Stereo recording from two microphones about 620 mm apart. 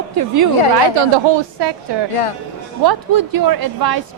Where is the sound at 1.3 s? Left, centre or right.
Right.